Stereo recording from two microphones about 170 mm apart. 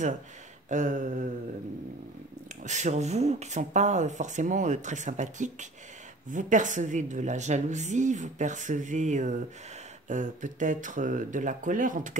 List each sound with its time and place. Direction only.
0.7 s a woman's voice: 45° right (ahead or behind)
2.6 s a woman's voice: 45° right (ahead or behind)